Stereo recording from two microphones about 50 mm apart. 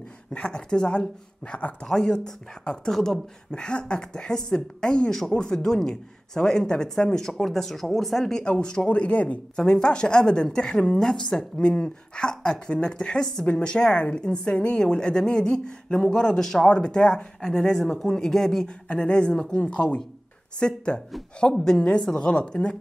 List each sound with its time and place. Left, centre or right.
0.3 s speech: centre
9.6 s speech: centre
18.9 s speech: left